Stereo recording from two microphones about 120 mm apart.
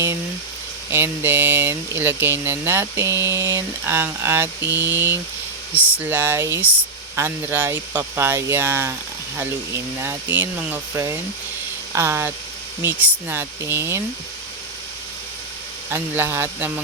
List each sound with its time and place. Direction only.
0.9 s speech: 20° right (ahead or behind)
10.0 s speech: 20° right (ahead or behind)
15.9 s speech: 20° right (ahead or behind)